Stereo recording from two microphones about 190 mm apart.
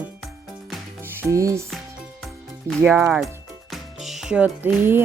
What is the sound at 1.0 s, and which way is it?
Music, 10° right (ahead or behind).